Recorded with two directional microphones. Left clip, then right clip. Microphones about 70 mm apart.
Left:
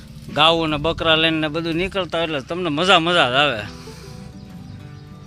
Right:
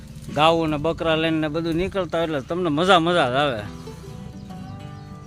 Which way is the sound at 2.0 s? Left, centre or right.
Right.